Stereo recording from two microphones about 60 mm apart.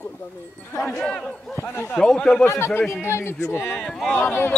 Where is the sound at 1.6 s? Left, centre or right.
Left.